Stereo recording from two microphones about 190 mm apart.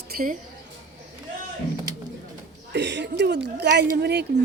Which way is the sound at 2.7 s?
65° right (ahead or behind).